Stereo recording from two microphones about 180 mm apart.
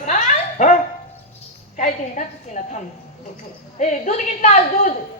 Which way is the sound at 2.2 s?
40° left (ahead or behind).